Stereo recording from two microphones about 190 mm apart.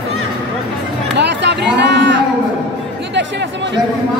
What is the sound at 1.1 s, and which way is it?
Music, 65° right (ahead or behind).